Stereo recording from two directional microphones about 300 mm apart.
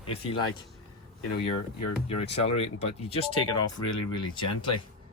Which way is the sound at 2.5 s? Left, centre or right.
Centre.